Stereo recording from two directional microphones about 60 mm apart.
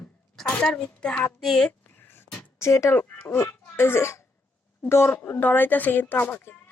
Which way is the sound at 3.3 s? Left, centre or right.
Left.